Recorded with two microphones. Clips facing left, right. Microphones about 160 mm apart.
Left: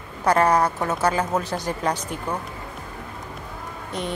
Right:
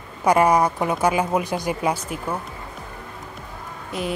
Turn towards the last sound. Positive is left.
turn(degrees=-5)  # may be behind; listen again after turning